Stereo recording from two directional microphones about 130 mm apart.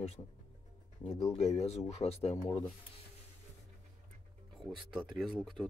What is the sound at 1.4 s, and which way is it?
Speech, 55° left (ahead or behind).